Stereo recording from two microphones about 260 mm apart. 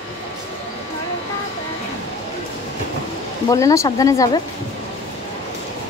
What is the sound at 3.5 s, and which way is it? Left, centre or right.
Speech, centre.